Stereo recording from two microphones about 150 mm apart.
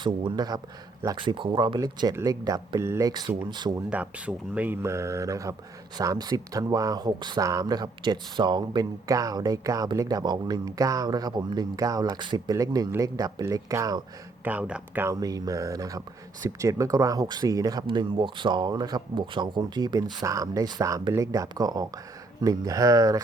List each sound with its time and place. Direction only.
0.0 s speech: 30° right (ahead or behind)
3.1 s speech: 30° right (ahead or behind)
3.8 s speech: 10° right (ahead or behind); by 14.0 s 25° right (ahead or behind)
14.4 s speech: 10° right (ahead or behind)
15.1 s speech: 25° right (ahead or behind)